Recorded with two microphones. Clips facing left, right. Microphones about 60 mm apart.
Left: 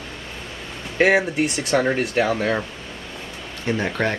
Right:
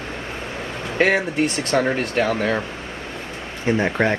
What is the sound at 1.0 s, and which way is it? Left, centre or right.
Speech, centre.